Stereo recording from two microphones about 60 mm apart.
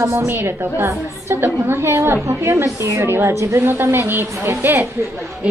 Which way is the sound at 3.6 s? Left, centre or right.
Right.